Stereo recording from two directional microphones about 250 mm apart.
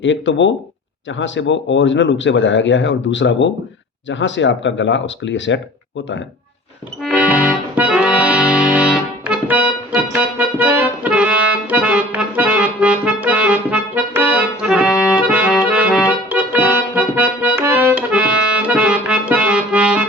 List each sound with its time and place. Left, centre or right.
0.0 s speech: left
7.0 s accordion: centre